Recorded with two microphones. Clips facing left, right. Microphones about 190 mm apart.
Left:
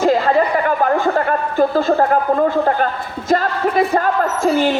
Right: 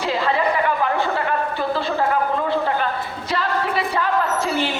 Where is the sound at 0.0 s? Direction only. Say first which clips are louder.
Left 6 dB; 45° left (ahead or behind).